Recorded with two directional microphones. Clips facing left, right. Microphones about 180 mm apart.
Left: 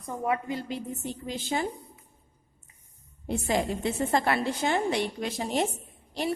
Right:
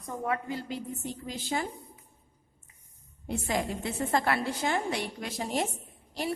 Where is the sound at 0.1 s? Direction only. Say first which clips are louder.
Left 3 dB; 15° left (ahead or behind).